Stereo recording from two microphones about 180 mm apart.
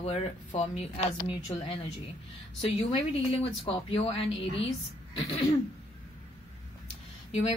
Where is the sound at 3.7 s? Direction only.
35° left (ahead or behind).